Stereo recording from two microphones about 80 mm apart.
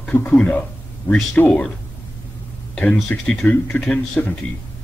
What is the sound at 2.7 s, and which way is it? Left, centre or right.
A man's voice, centre.